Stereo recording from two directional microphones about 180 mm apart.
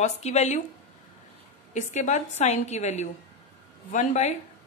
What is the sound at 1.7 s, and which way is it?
Speech, 45° left (ahead or behind).